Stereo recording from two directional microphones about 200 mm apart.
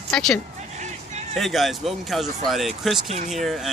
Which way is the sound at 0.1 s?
5° left (ahead or behind).